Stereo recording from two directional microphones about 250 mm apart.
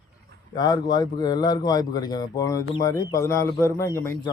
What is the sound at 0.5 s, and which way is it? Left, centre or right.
A man's voice, centre.